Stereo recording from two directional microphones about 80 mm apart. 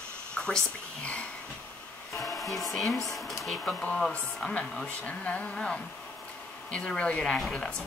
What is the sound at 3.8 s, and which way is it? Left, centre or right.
A woman's voice, centre.